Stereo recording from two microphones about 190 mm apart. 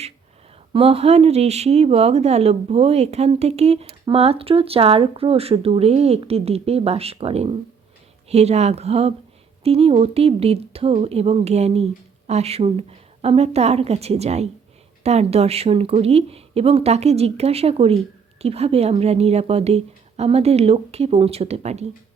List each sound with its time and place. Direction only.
0.7 s speech: 30° right (ahead or behind)